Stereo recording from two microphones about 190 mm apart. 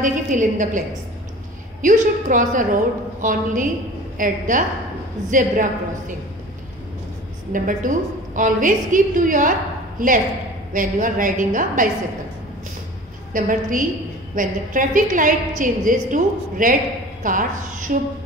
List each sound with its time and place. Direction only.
0.0 s a woman's voice: 40° right (ahead or behind)
7.5 s a woman's voice: 45° right (ahead or behind)
13.3 s a woman's voice: 45° right (ahead or behind)